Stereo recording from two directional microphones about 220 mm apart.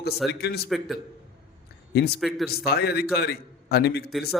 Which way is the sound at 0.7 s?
Centre (ahead or behind).